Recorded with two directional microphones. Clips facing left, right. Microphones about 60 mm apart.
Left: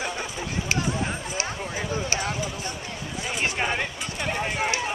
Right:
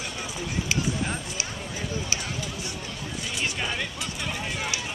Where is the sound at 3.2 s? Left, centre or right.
Left.